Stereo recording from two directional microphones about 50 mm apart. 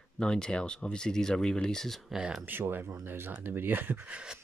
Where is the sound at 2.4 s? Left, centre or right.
Right.